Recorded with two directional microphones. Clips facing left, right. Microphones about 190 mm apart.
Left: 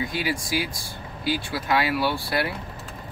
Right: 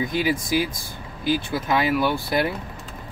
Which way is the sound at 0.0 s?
20° right (ahead or behind).